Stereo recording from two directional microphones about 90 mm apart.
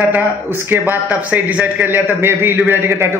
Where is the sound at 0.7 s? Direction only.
20° right (ahead or behind).